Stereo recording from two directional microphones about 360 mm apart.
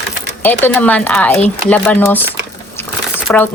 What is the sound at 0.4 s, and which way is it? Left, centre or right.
A woman's voice, centre.